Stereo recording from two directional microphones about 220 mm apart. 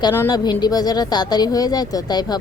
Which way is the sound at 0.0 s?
15° left (ahead or behind).